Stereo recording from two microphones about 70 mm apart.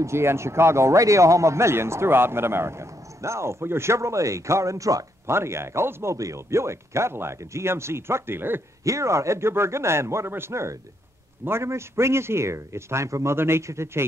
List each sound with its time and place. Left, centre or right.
0.0 s speech: right
5.2 s speech: right
6.1 s speech: right
8.8 s speech: right